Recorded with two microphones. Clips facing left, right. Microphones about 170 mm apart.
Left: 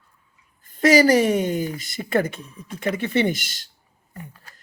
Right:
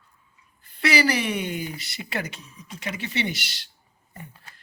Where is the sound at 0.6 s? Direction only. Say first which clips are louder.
Left 7 dB; 45° left (ahead or behind).